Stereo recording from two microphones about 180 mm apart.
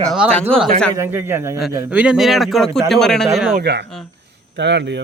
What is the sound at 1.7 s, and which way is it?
A man's voice, 10° right (ahead or behind).